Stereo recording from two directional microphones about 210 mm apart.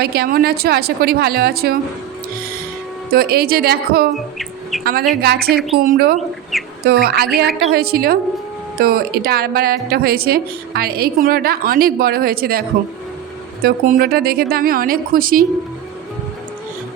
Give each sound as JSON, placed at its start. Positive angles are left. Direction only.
{"t": 0.0, "sound": "a woman's voice", "side_deg": -50}
{"t": 3.1, "sound": "a woman's voice", "side_deg": -45}
{"t": 5.5, "sound": "speech", "side_deg": 0}
{"t": 5.8, "sound": "a woman's voice", "side_deg": -45}